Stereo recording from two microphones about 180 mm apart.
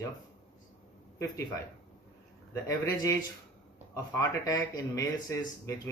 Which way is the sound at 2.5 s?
20° left (ahead or behind).